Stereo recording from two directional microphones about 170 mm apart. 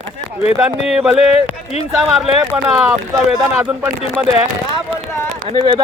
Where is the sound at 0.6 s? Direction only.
5° right (ahead or behind).